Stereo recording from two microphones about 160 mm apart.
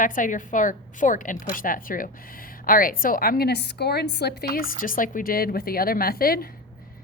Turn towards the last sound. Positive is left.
turn(degrees=70)  # may be behind; listen again after turning